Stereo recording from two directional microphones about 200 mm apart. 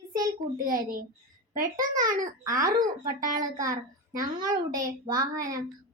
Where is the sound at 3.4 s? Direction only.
20° right (ahead or behind).